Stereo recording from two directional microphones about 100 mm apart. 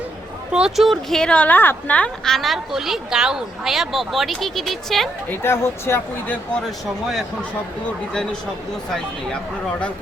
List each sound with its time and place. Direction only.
0.5 s a woman's voice: 5° right (ahead or behind)
5.3 s speech: 25° left (ahead or behind)
6.7 s a woman's voice: centre (ahead or behind)